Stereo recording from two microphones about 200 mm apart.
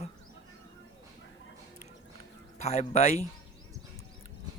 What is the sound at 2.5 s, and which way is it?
Speech, 35° left (ahead or behind).